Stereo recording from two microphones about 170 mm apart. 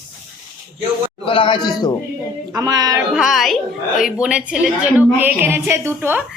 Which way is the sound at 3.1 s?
Centre (ahead or behind).